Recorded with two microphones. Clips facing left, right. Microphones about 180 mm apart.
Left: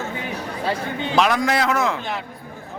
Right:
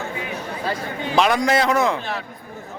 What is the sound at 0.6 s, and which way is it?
Speech, 25° left (ahead or behind).